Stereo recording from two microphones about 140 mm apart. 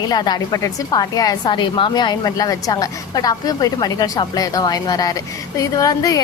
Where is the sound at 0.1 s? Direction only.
25° left (ahead or behind).